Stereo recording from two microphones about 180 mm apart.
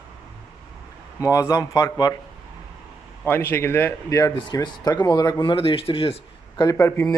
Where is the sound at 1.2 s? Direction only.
20° left (ahead or behind).